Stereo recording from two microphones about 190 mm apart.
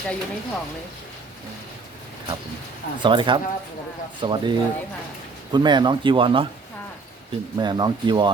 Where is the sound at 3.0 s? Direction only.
25° right (ahead or behind).